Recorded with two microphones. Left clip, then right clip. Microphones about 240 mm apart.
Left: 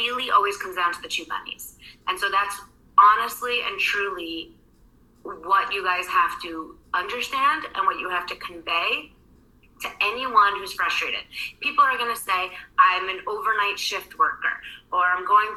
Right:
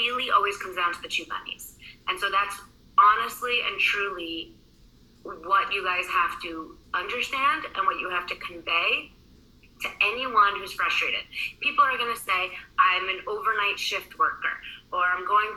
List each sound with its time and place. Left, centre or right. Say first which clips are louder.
0.0 s a woman's voice: left 2 dB; left